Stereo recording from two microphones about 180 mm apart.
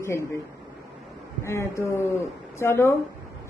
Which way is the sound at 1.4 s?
15° left (ahead or behind).